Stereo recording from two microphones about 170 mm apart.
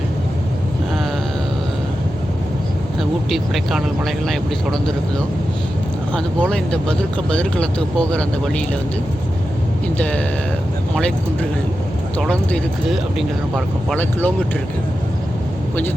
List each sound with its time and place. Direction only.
3.0 s speech: centre (ahead or behind)
6.1 s speech: 5° left (ahead or behind)
10.0 s speech: 10° left (ahead or behind)